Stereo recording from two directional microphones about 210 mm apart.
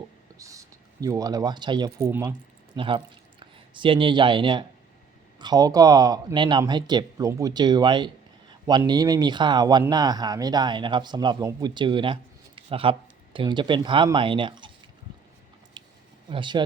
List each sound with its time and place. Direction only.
0.3 s speech: 15° right (ahead or behind)
2.7 s speech: 25° right (ahead or behind)
15.8 s a sound: 20° right (ahead or behind)
16.3 s speech: 20° right (ahead or behind)